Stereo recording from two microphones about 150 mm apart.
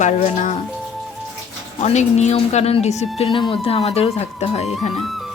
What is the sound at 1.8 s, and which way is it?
Speech, 50° left (ahead or behind).